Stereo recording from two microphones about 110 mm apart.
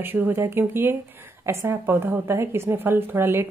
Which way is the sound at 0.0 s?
20° right (ahead or behind).